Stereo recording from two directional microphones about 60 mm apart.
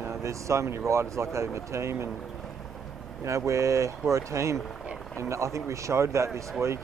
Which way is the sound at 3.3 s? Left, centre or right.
Right.